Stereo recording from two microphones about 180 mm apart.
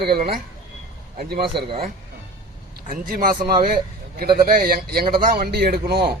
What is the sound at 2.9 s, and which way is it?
A man's voice, 50° right (ahead or behind).